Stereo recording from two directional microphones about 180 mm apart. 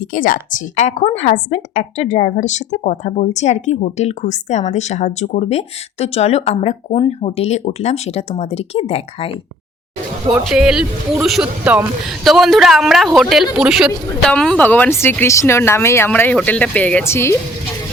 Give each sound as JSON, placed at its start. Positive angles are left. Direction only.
{"t": 0.1, "sound": "a woman's voice", "side_deg": 50}
{"t": 10.4, "sound": "a man's voice", "side_deg": -5}